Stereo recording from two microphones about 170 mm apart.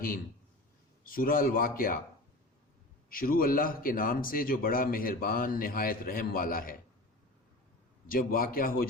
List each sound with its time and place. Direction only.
1.0 s speech: 55° left (ahead or behind)
3.1 s speech: 55° left (ahead or behind)
8.0 s speech: 55° left (ahead or behind)